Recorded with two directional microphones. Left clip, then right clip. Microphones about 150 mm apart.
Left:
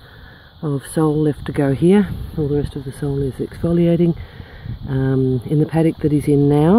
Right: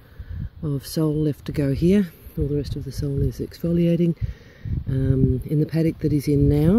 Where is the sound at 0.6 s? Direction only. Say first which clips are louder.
Left 6 dB; 20° right (ahead or behind).